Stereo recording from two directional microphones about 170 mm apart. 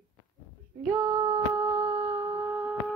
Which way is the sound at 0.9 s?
15° right (ahead or behind).